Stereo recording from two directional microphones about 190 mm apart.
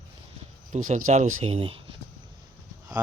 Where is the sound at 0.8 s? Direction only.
45° right (ahead or behind).